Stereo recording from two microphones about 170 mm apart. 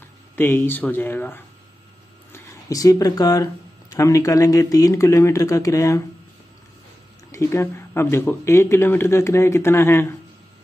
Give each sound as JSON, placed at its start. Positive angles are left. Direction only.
{"t": 0.4, "sound": "speech", "side_deg": 10}
{"t": 7.2, "sound": "speech", "side_deg": 15}